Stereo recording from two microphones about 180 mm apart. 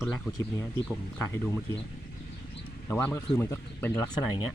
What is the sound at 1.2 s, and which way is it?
Speech, 15° left (ahead or behind).